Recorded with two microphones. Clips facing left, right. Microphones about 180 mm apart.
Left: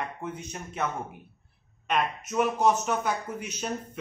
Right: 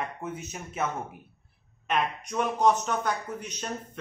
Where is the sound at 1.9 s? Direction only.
Centre (ahead or behind).